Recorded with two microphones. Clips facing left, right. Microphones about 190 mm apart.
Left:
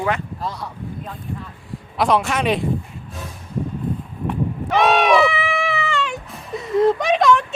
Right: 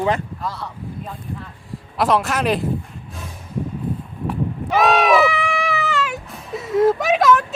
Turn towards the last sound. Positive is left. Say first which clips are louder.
# even
turn(degrees=0)  # may be behind; listen again after turning